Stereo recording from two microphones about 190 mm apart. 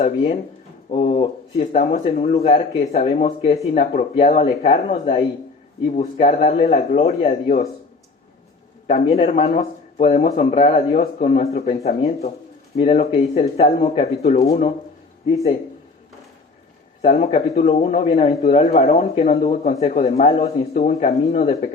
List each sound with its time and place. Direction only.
0.9 s speech: 35° left (ahead or behind)
1.1 s speech: 25° left (ahead or behind)
1.7 s a man's voice: 40° left (ahead or behind)
8.9 s a man's voice: 35° left (ahead or behind)
17.0 s a man's voice: 35° left (ahead or behind)